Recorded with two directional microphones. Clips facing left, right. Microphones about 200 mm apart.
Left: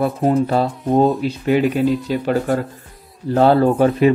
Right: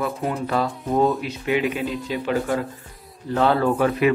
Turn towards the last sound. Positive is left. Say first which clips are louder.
# left 5 dB
turn(degrees=30)  # may be behind; listen again after turning